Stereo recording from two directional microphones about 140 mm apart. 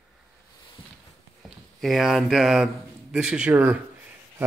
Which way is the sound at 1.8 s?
Centre (ahead or behind).